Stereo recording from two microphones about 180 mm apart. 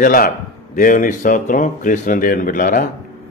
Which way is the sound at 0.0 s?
50° left (ahead or behind).